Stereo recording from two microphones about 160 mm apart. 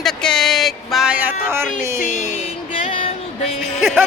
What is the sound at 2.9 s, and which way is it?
Music, 35° left (ahead or behind).